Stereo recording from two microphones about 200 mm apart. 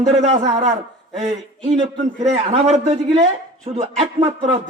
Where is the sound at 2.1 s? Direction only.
35° right (ahead or behind).